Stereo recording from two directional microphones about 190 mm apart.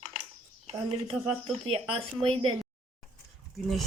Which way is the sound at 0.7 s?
35° right (ahead or behind).